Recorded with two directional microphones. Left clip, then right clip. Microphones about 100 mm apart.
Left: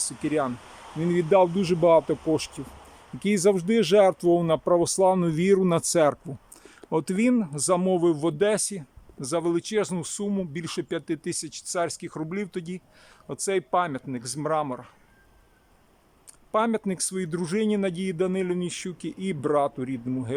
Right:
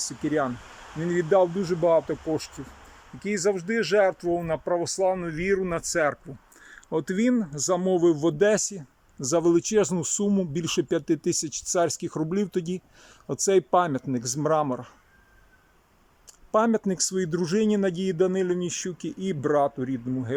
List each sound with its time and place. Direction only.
0.0 s speech: centre (ahead or behind)
0.9 s speech: 15° left (ahead or behind); by 6.1 s 30° left (ahead or behind)
6.6 s speech: 10° left (ahead or behind); by 14.8 s 20° right (ahead or behind)
16.5 s speech: 15° right (ahead or behind); by 20.1 s centre (ahead or behind)